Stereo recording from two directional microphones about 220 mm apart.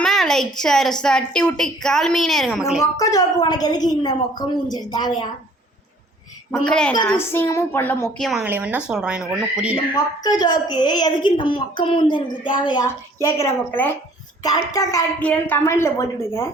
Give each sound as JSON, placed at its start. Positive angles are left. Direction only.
{"t": 0.0, "sound": "a woman's voice", "side_deg": 0}
{"t": 3.0, "sound": "a woman's voice", "side_deg": 15}
{"t": 6.7, "sound": "a woman's voice", "side_deg": 5}
{"t": 8.3, "sound": "a woman's voice", "side_deg": -5}
{"t": 9.7, "sound": "a woman's voice", "side_deg": 15}